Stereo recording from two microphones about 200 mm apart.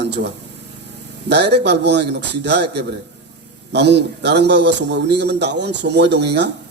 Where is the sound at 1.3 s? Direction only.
55° right (ahead or behind).